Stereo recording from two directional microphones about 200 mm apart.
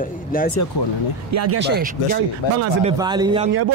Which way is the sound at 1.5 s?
60° right (ahead or behind).